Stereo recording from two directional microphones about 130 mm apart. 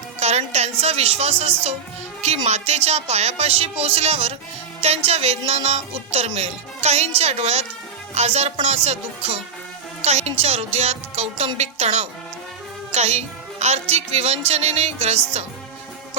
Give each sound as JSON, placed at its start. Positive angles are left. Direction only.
{"t": 0.2, "sound": "a woman's voice", "side_deg": -55}